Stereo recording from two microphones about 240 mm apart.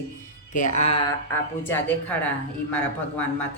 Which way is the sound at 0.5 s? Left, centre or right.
Left.